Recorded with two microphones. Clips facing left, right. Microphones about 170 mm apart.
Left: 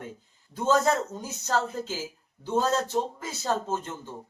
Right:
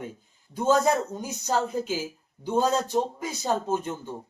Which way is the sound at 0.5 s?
10° right (ahead or behind).